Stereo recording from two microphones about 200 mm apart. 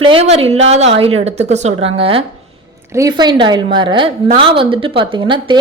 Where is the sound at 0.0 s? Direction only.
30° right (ahead or behind).